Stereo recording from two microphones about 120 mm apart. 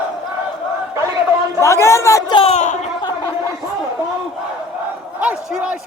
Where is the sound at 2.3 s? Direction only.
50° left (ahead or behind).